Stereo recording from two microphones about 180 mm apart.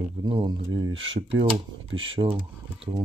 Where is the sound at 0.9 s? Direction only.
90° right.